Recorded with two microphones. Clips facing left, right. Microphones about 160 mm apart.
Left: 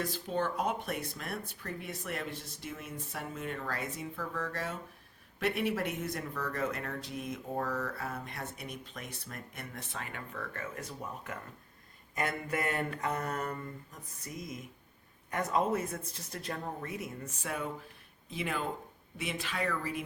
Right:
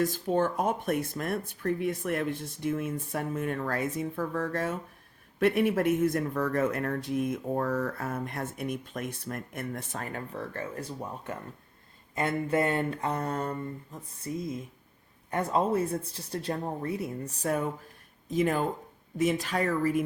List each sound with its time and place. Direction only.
0.0 s speech: 45° right (ahead or behind); by 11.3 s 30° right (ahead or behind)
12.1 s a sound: 25° right (ahead or behind)
15.3 s speech: 30° right (ahead or behind); by 20.1 s 45° right (ahead or behind)